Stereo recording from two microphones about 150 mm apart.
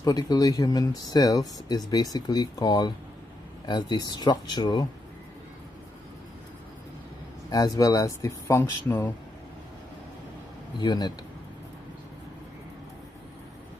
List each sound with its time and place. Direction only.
0.0 s speech: 25° left (ahead or behind)
7.4 s speech: 25° left (ahead or behind)
10.8 s speech: 30° left (ahead or behind)